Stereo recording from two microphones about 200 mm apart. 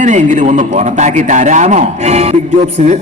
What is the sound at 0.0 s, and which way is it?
A man's voice, 40° right (ahead or behind).